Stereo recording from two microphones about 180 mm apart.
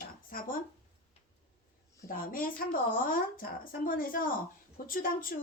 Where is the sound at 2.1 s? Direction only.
50° left (ahead or behind).